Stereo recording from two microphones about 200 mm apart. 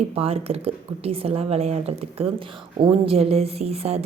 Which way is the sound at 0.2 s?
30° right (ahead or behind).